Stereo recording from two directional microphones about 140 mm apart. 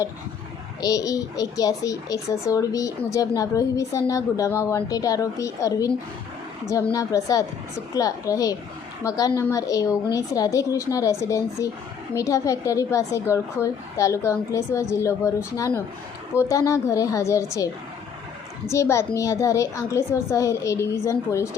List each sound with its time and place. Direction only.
0.8 s a child's voice: 25° left (ahead or behind)
6.9 s a child's voice: 25° left (ahead or behind)
16.3 s a child's voice: 20° left (ahead or behind)
18.7 s a child's voice: 20° left (ahead or behind)